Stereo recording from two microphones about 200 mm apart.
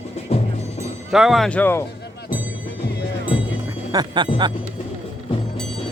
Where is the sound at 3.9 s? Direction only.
20° right (ahead or behind).